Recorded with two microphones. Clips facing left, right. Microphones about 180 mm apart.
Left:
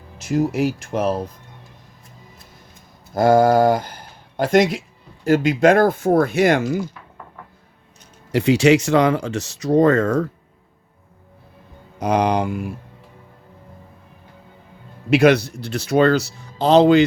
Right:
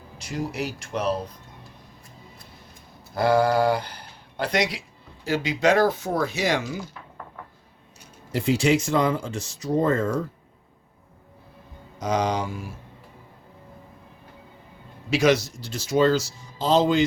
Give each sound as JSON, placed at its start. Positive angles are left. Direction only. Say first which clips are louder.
{"t": 0.2, "sound": "speech", "louder": "left 10 dB", "side_deg": 50}
{"t": 3.2, "sound": "speech", "louder": "left 6 dB", "side_deg": 45}
{"t": 8.3, "sound": "speech", "louder": "left 7 dB", "side_deg": 75}
{"t": 11.9, "sound": "speech", "louder": "left 6 dB", "side_deg": 60}
{"t": 15.1, "sound": "speech", "louder": "left 6 dB", "side_deg": 60}